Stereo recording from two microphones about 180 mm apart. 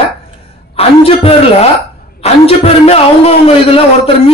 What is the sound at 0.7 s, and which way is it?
A man's voice, 35° left (ahead or behind).